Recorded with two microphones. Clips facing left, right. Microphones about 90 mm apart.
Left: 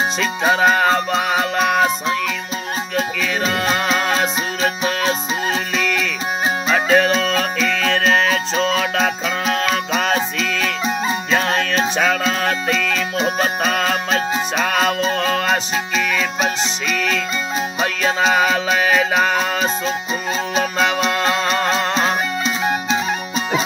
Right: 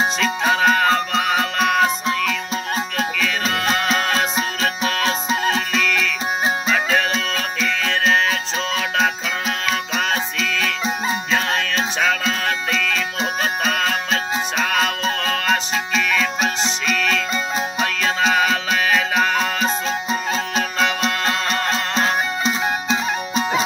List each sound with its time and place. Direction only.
0.2 s music: 20° left (ahead or behind)
4.6 s music: 15° left (ahead or behind)
6.7 s music: 40° left (ahead or behind)
7.8 s music: 50° left (ahead or behind); by 22.1 s 20° left (ahead or behind)